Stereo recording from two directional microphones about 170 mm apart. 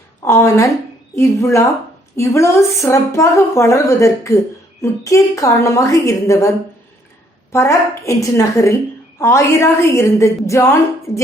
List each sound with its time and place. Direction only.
0.3 s a woman's voice: 15° left (ahead or behind)
7.5 s a woman's voice: 15° left (ahead or behind)